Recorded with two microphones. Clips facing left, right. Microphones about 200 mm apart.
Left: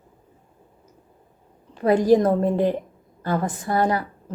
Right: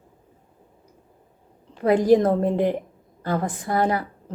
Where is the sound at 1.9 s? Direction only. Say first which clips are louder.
Even; 20° right (ahead or behind).